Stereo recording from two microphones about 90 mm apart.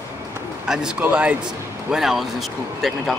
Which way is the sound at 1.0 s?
15° right (ahead or behind).